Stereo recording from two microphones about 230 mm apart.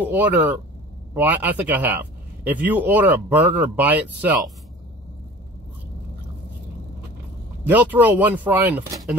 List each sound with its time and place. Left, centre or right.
0.0 s speech: centre
7.6 s speech: centre